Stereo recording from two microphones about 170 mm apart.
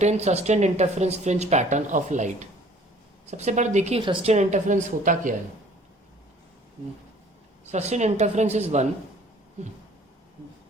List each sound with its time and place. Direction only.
0.0 s a woman's voice: 40° right (ahead or behind)
7.7 s a woman's voice: 40° right (ahead or behind)